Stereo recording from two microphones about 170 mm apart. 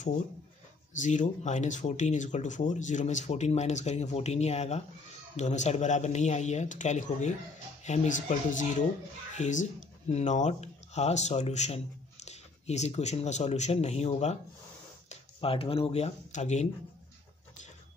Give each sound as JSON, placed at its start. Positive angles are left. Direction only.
{"t": 0.9, "sound": "speech", "side_deg": 45}